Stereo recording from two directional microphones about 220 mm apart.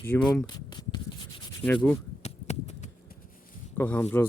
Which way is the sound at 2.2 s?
30° left (ahead or behind).